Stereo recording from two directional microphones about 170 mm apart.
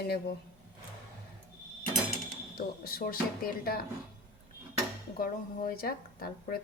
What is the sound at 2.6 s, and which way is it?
Speech, 60° left (ahead or behind).